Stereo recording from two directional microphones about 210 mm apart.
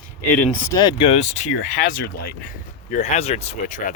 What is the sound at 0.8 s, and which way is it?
Speech, 25° left (ahead or behind).